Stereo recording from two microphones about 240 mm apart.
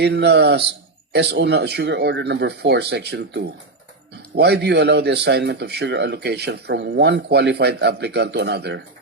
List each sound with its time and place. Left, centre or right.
0.0 s a man's voice: right